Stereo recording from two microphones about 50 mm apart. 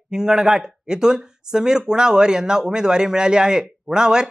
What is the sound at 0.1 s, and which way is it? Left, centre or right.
Speech, centre.